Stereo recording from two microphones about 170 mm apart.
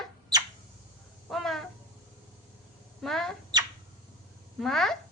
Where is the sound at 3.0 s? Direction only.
Centre (ahead or behind).